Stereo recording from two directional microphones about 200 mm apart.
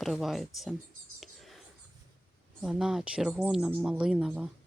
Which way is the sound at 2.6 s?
5° right (ahead or behind).